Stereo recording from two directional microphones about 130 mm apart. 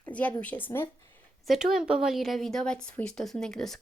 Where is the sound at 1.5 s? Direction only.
5° right (ahead or behind).